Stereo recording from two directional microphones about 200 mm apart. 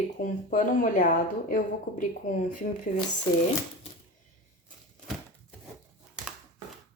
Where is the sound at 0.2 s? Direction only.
40° left (ahead or behind).